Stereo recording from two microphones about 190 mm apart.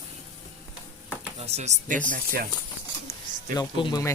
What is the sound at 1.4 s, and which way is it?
Speech, 35° right (ahead or behind).